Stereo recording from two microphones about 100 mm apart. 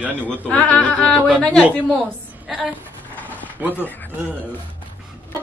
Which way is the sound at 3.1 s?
15° left (ahead or behind).